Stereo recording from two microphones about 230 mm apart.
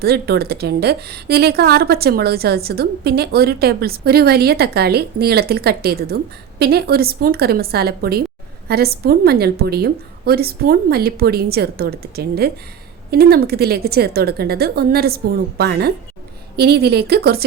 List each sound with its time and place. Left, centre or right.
0.0 s a woman's voice: right